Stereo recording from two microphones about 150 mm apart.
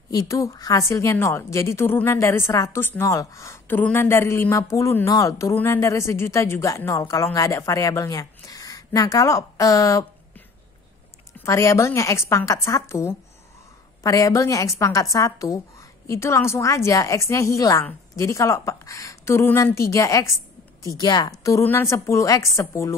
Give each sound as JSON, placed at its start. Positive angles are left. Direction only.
{"t": 0.1, "sound": "a woman's voice", "side_deg": 20}
{"t": 11.3, "sound": "a woman's voice", "side_deg": 20}